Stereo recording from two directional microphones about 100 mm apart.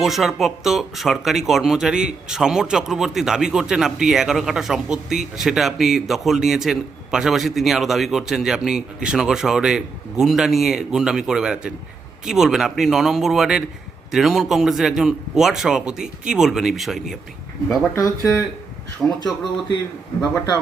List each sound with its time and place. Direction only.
0.0 s speech: centre (ahead or behind)
17.9 s speech: 30° left (ahead or behind)
19.0 s speech: 10° left (ahead or behind)